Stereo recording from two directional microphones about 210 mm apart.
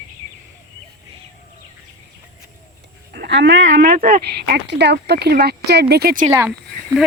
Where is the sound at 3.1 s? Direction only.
55° right (ahead or behind).